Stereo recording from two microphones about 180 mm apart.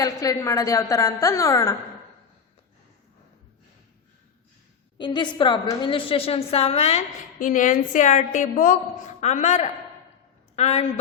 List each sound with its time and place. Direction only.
0.0 s a woman's voice: 20° left (ahead or behind)
4.9 s a woman's voice: 25° left (ahead or behind)